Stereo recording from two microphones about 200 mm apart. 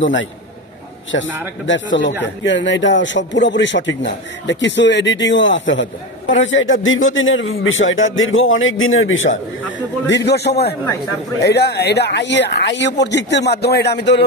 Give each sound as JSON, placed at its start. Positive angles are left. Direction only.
{"t": 0.0, "sound": "a man's voice", "side_deg": 65}
{"t": 9.7, "sound": "speech", "side_deg": 65}